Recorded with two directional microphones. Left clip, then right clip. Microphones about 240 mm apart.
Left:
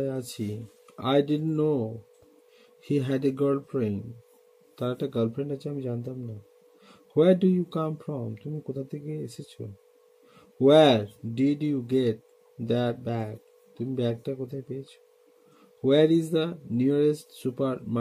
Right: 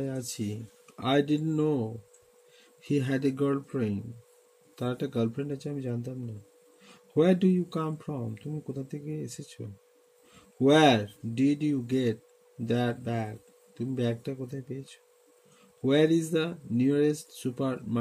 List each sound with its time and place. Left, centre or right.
0.0 s speech: centre
7.2 s speech: centre
10.6 s speech: centre